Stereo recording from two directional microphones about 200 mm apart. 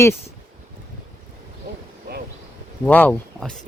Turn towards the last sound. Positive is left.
turn(degrees=5)  # may be behind; listen again after turning